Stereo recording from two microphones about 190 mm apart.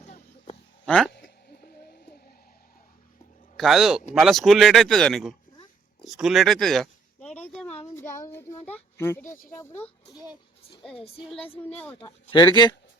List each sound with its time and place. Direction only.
0.9 s speech: 5° left (ahead or behind)
1.1 s a sound: 60° left (ahead or behind)
3.6 s speech: centre (ahead or behind)
7.4 s a sound: centre (ahead or behind)
7.9 s child singing: 15° left (ahead or behind)
9.6 s speech: 10° left (ahead or behind)
10.9 s speech: 30° left (ahead or behind)
11.8 s speech: 10° left (ahead or behind)
12.3 s speech: 25° left (ahead or behind)